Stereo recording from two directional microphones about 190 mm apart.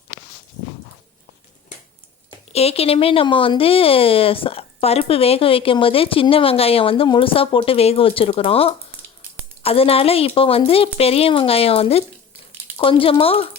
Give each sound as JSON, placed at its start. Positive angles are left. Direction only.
{"t": 2.5, "sound": "a woman's voice", "side_deg": 30}